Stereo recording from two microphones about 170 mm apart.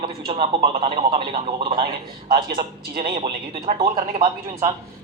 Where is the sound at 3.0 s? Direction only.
30° right (ahead or behind).